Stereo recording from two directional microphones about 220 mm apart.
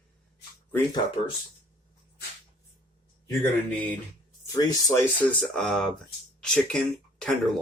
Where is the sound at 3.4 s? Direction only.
5° left (ahead or behind).